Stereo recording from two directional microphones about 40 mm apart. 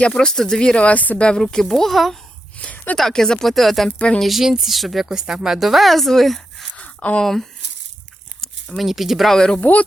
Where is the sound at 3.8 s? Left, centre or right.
Left.